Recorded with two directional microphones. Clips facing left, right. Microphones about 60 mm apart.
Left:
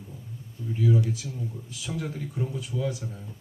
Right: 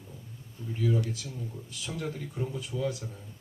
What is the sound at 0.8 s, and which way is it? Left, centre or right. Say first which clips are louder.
Speech: left 4 dB; centre.